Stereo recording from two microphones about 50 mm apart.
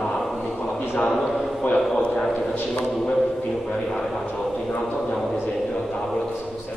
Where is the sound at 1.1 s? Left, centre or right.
Centre.